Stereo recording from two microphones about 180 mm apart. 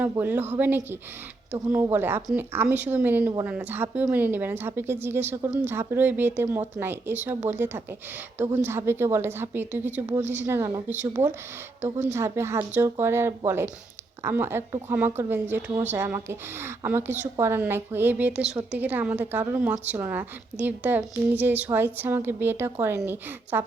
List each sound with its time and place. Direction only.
0.0 s a woman's voice: 10° right (ahead or behind)
11.8 s speech: 40° right (ahead or behind)
12.1 s a woman's voice: 15° right (ahead or behind)